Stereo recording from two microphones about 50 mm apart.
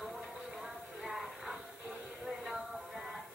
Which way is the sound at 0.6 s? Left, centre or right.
Centre.